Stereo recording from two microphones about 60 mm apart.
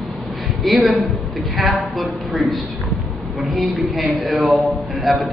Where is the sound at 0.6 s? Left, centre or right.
Centre.